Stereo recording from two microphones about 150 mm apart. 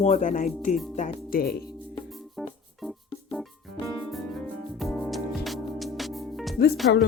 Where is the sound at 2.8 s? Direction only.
Centre (ahead or behind).